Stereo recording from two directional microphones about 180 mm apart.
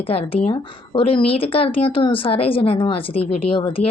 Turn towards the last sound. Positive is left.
turn(degrees=30)  # may be behind; listen again after turning